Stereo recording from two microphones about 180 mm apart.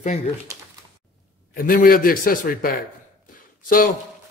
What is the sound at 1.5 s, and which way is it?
Speech, 50° left (ahead or behind).